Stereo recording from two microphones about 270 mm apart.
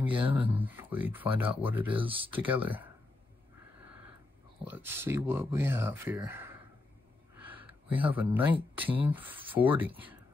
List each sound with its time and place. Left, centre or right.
0.4 s speech: centre
2.0 s speech: centre
2.3 s speech: centre
4.6 s speech: centre
7.3 s a sound: centre
8.9 s speech: centre